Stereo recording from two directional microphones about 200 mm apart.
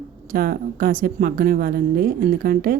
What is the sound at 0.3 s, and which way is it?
A woman's voice, 45° right (ahead or behind).